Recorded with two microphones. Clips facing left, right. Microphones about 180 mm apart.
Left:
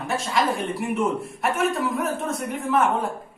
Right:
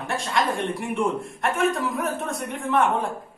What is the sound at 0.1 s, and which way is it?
A man's voice, centre (ahead or behind).